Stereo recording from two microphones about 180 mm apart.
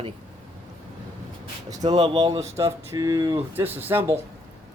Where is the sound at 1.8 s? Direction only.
30° right (ahead or behind); by 4.2 s 10° right (ahead or behind).